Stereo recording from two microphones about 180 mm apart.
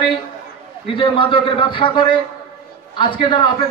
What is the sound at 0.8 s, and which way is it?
A man's voice, 30° left (ahead or behind).